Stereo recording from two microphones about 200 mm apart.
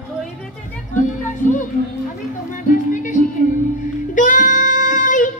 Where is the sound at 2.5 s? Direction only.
40° left (ahead or behind).